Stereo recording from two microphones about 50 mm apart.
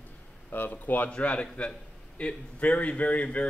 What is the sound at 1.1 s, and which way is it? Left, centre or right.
A man's voice, left.